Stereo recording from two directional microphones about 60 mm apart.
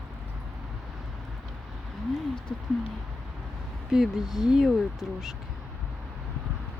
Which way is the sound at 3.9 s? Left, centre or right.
Centre.